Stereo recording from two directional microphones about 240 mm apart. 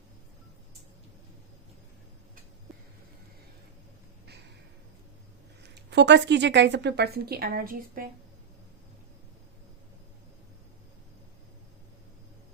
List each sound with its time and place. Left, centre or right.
5.6 s a woman's voice: right